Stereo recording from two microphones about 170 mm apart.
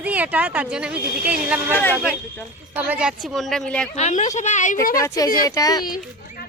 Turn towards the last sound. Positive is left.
turn(degrees=20)  # may be behind; listen again after turning